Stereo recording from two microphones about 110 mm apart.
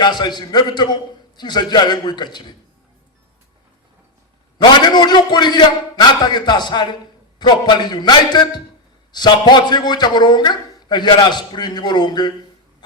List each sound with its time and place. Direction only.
0.0 s a man's voice: 40° left (ahead or behind)
4.5 s a man's voice: 40° left (ahead or behind)